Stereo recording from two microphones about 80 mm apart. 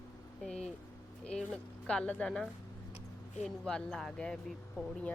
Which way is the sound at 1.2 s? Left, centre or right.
Centre.